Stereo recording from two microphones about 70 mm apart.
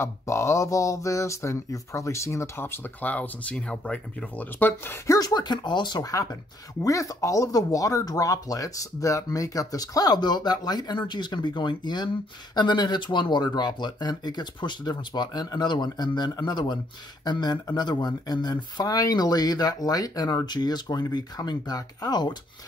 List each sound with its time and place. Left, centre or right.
0.0 s speech: left; by 4.5 s centre
4.6 s speech: left
5.2 s speech: left
6.8 s speech: left